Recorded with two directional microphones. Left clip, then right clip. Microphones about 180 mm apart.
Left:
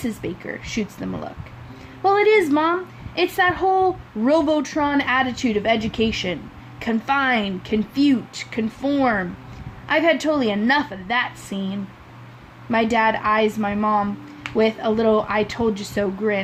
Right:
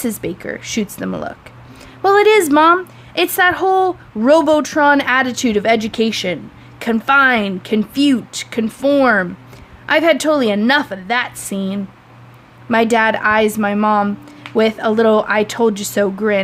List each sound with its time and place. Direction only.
0.0 s a woman's voice: 45° right (ahead or behind)